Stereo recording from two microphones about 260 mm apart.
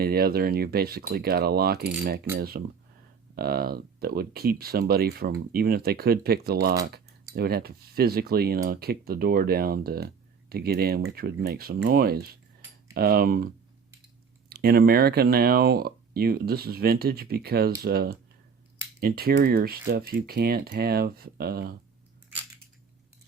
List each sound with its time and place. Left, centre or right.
0.0 s speech: right
14.5 s speech: right